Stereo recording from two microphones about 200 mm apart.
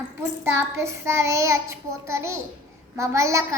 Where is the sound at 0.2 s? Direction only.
15° right (ahead or behind).